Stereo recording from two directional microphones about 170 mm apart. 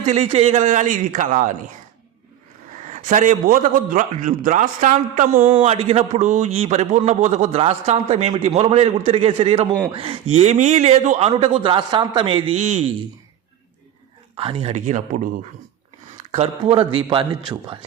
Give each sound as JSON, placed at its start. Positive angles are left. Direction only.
{"t": 0.0, "sound": "a man's voice", "side_deg": -40}
{"t": 2.8, "sound": "a man's voice", "side_deg": -45}
{"t": 5.5, "sound": "a man's voice", "side_deg": -35}
{"t": 14.3, "sound": "a man's voice", "side_deg": -35}
{"t": 16.3, "sound": "a man's voice", "side_deg": -35}